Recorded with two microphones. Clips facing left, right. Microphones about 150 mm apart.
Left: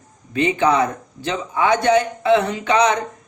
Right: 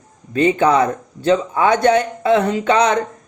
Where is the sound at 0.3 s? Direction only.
45° right (ahead or behind).